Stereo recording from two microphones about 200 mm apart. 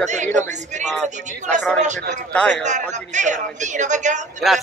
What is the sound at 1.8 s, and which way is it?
A woman's voice, 35° right (ahead or behind).